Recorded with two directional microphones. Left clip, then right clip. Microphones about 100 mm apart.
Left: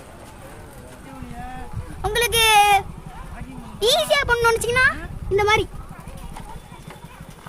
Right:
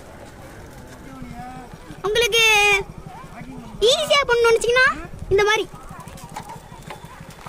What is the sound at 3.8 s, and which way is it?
Speech, 20° left (ahead or behind).